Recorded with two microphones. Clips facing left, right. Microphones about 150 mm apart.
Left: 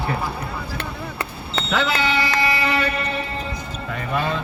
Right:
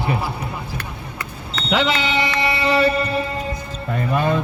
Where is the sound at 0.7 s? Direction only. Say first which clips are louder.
Left 3 dB; 30° left (ahead or behind).